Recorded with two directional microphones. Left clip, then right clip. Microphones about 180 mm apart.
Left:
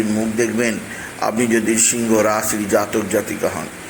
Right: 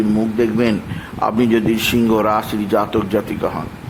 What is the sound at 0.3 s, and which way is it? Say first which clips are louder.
A man's voice: right 1 dB; 20° right (ahead or behind).